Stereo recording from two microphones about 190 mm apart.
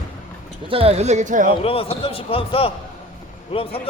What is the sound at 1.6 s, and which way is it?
Speech, 30° left (ahead or behind).